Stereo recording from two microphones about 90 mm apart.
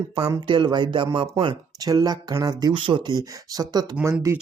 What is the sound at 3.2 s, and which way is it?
Speech, 45° right (ahead or behind).